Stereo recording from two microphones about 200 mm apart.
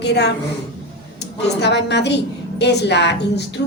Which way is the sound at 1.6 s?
60° left (ahead or behind).